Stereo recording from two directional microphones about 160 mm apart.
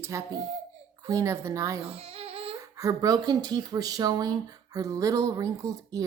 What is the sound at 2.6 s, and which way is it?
Speech, 20° right (ahead or behind).